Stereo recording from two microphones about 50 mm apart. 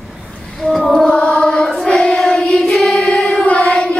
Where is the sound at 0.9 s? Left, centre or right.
Centre.